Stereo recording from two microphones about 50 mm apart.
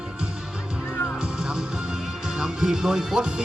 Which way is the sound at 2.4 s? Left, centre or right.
Centre.